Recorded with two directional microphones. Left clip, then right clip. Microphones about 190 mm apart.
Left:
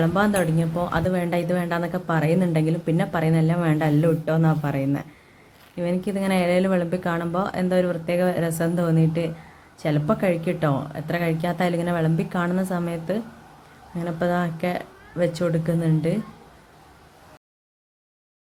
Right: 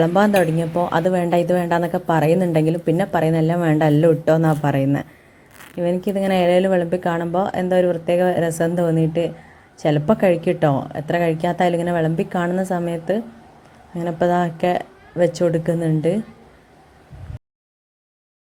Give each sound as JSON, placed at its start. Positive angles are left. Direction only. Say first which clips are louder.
{"t": 0.0, "sound": "a woman's voice", "louder": "right 6 dB", "side_deg": -25}